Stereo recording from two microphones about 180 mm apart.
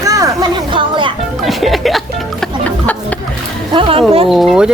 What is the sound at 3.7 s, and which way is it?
Speech, 30° right (ahead or behind).